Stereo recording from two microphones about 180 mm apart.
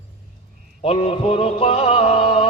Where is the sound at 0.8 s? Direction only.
35° left (ahead or behind).